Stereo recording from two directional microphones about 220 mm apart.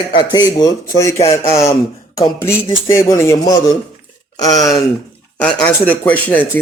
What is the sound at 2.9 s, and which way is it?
Speech, 10° left (ahead or behind).